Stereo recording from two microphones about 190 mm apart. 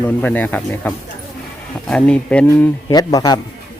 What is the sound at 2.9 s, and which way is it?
Speech, 20° left (ahead or behind).